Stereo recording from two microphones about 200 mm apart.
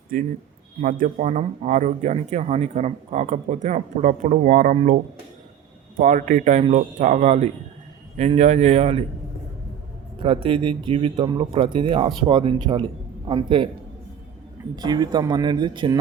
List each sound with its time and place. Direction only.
0.1 s speech: 40° right (ahead or behind)
6.0 s speech: 40° right (ahead or behind)
10.2 s speech: 25° right (ahead or behind)
14.8 s speech: 20° right (ahead or behind)